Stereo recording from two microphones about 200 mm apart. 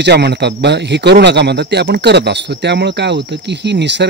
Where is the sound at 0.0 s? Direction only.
55° right (ahead or behind).